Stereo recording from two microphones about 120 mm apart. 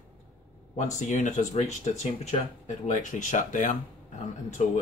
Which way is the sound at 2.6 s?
90° left.